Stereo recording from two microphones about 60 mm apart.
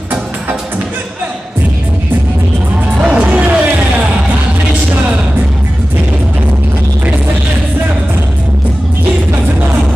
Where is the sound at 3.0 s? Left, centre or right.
Right.